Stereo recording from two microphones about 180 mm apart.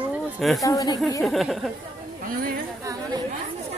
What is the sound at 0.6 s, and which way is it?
Speech, 20° left (ahead or behind).